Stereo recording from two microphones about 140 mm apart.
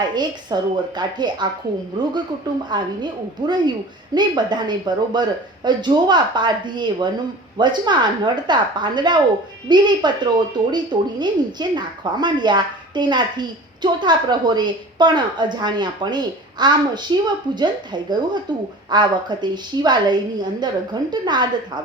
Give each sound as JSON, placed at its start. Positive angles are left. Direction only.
{"t": 0.0, "sound": "a woman's voice", "side_deg": -30}